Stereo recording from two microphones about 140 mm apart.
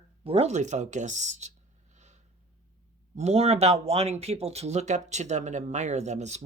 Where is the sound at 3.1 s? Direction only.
50° right (ahead or behind).